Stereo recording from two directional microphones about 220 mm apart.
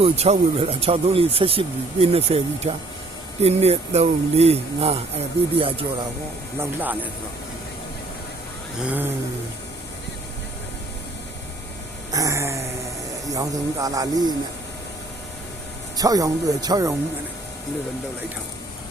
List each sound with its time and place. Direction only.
0.0 s speech: 25° right (ahead or behind)
6.6 s speech: 10° right (ahead or behind)
8.8 s speech: 10° right (ahead or behind)
12.1 s a sound: 15° right (ahead or behind)
13.2 s speech: 15° right (ahead or behind)
16.0 s speech: 15° right (ahead or behind)